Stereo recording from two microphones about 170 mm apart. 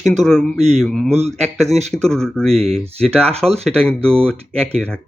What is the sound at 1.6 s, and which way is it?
Speech, 40° right (ahead or behind).